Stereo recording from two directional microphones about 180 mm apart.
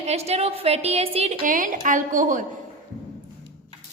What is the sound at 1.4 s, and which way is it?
Speech, 45° right (ahead or behind).